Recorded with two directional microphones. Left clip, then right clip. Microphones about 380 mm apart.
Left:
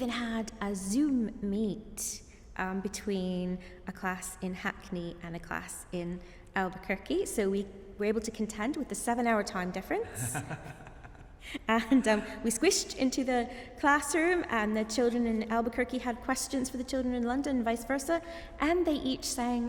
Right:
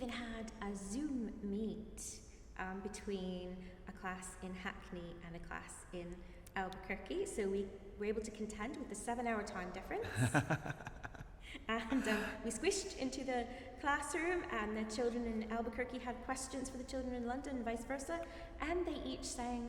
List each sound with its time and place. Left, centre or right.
0.0 s a woman's voice: left
10.1 s a woman's voice: right
11.5 s a woman's voice: left